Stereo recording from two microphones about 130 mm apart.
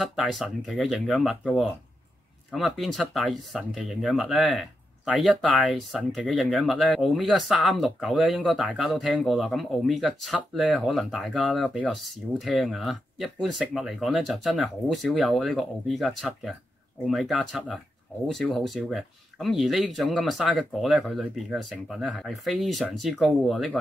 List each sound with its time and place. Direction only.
0.0 s speech: 5° right (ahead or behind)
2.5 s speech: centre (ahead or behind)